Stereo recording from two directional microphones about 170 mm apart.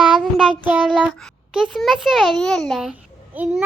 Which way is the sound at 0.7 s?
5° right (ahead or behind).